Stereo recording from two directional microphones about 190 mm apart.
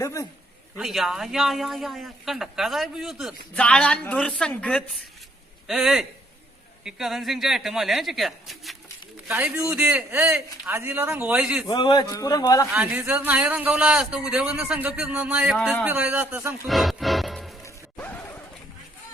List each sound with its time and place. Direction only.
0.0 s a man's voice: 15° left (ahead or behind)
0.8 s a man's voice: centre (ahead or behind)
11.7 s a man's voice: 25° left (ahead or behind)
12.7 s a man's voice: 5° right (ahead or behind)